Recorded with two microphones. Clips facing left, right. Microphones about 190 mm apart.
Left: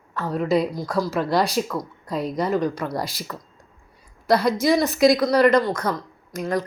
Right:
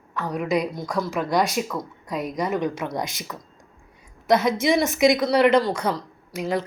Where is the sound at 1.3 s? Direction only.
Centre (ahead or behind).